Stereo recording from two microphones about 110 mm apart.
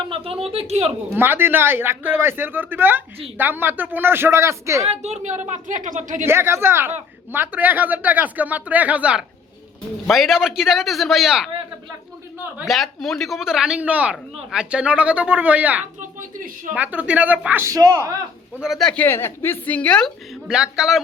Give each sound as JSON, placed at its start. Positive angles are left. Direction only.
{"t": 0.0, "sound": "speech", "side_deg": -55}
{"t": 1.1, "sound": "speech", "side_deg": -20}
{"t": 4.9, "sound": "a woman's voice", "side_deg": -85}
{"t": 6.2, "sound": "a man's voice", "side_deg": -25}
{"t": 12.6, "sound": "speech", "side_deg": 0}
{"t": 17.6, "sound": "a man's voice", "side_deg": -30}
{"t": 18.6, "sound": "a man's voice", "side_deg": 0}
{"t": 19.0, "sound": "a woman's voice", "side_deg": 20}
{"t": 20.5, "sound": "a man's voice", "side_deg": -5}